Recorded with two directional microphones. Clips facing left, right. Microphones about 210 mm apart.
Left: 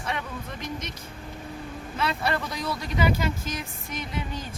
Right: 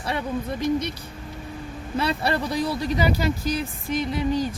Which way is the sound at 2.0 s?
35° right (ahead or behind).